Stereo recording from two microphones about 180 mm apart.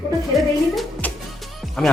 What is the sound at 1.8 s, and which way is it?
Speech, 5° left (ahead or behind).